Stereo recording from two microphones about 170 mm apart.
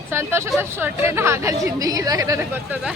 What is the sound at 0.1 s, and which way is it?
Speech, 15° right (ahead or behind).